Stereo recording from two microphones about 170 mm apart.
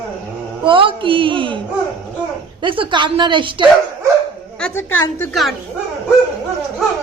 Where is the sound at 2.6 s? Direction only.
30° right (ahead or behind).